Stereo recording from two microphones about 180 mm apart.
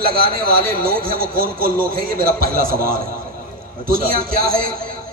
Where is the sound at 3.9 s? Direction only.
55° right (ahead or behind).